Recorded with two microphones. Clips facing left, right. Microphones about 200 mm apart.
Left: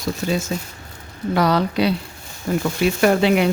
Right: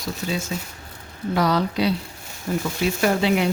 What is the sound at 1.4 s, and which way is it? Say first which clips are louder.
Speech: left 3 dB; 65° left (ahead or behind).